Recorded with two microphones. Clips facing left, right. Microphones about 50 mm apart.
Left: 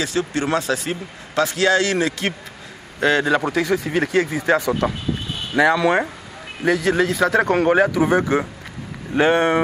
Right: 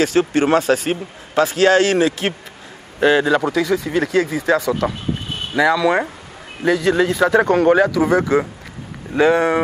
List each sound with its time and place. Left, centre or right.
0.0 s speech: right
0.3 s speech: right
0.7 s speech: right
1.3 s a man's voice: centre
1.6 s speech: right
2.0 s a man's voice: centre
3.3 s a man's voice: centre
5.6 s speech: left
6.6 s a man's voice: centre
7.5 s speech: centre
9.1 s speech: left